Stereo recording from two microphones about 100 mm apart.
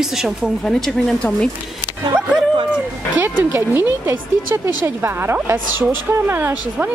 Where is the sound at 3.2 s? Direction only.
20° right (ahead or behind).